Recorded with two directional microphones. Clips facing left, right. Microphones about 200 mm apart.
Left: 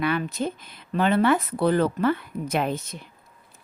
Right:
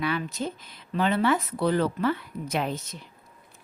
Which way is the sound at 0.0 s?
55° left (ahead or behind).